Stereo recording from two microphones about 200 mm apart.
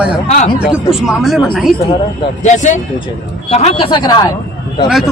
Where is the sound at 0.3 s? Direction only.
35° left (ahead or behind).